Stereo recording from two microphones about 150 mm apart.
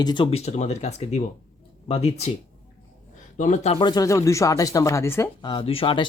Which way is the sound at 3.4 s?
55° left (ahead or behind).